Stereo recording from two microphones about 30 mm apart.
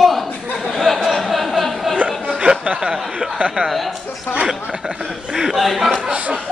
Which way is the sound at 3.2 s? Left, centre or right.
Right.